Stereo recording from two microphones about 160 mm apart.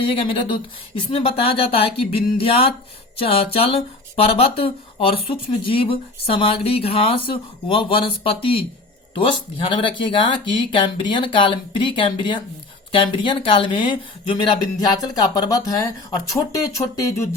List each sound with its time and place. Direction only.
0.0 s speech: 35° left (ahead or behind)